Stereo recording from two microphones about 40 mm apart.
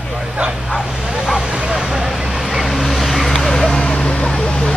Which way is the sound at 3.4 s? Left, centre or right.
Centre.